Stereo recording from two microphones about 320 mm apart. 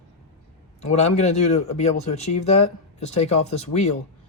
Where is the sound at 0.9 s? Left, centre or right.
Centre.